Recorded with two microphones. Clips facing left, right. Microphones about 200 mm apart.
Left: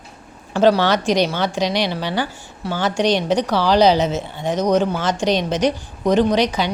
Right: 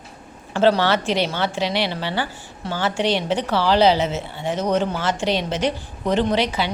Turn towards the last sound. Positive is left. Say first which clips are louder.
# left 4 dB
turn(degrees=15)  # may be behind; listen again after turning